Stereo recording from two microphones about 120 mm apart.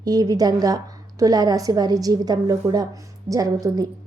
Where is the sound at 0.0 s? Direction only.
30° right (ahead or behind).